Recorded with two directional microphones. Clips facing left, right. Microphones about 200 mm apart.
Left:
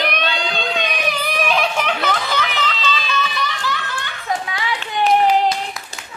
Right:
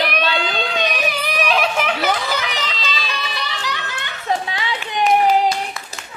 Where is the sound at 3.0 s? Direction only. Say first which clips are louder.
Left 5 dB; 35° right (ahead or behind).